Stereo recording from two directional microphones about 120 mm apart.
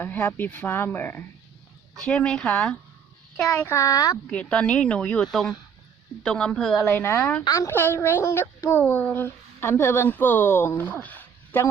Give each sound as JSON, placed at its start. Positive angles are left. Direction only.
{"t": 0.0, "sound": "speech", "side_deg": 15}
{"t": 3.7, "sound": "a woman's voice", "side_deg": 25}
{"t": 4.3, "sound": "speech", "side_deg": 10}
{"t": 6.9, "sound": "a woman's voice", "side_deg": 20}
{"t": 7.4, "sound": "speech", "side_deg": 25}